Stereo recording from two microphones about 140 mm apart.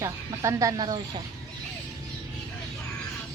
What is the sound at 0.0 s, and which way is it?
Speech, 20° right (ahead or behind).